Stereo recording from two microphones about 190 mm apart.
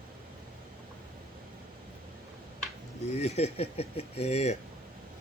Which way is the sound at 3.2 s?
35° left (ahead or behind).